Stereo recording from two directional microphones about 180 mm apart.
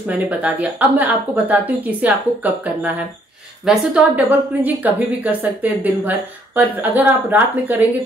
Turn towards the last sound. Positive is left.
turn(degrees=-10)  # may be behind; listen again after turning